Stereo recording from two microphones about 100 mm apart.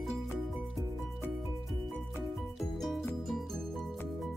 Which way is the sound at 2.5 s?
Centre (ahead or behind).